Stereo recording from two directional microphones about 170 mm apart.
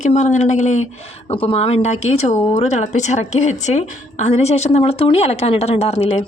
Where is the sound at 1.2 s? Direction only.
30° left (ahead or behind).